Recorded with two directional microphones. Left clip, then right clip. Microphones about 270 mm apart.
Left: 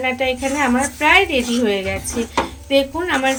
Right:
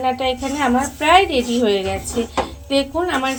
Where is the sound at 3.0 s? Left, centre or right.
Left.